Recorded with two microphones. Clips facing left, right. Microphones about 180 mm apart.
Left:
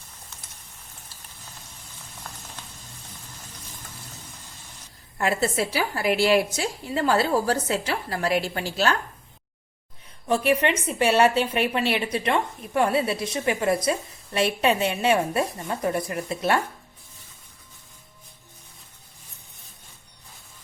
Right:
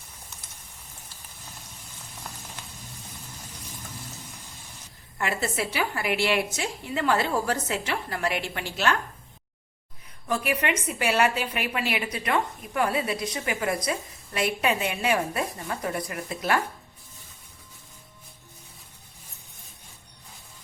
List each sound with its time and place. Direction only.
5.1 s a woman's voice: 35° left (ahead or behind)
10.2 s a woman's voice: 30° left (ahead or behind)